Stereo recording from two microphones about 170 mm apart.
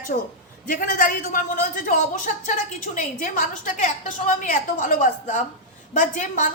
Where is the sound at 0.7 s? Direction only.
55° left (ahead or behind).